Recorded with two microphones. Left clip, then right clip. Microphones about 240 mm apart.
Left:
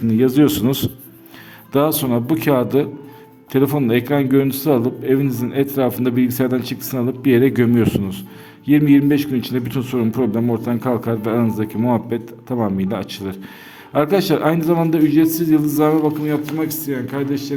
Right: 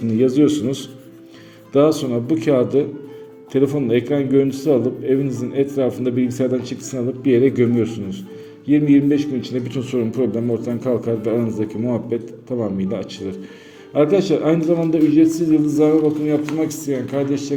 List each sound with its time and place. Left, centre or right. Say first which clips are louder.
0.1 s a man's voice: even; left